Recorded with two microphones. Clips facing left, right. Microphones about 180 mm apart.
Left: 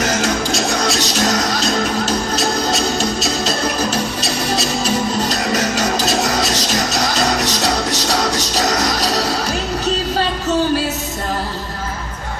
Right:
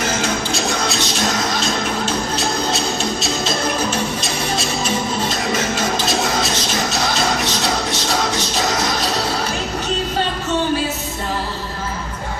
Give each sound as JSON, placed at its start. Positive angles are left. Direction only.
{"t": 0.0, "sound": "music", "side_deg": 40}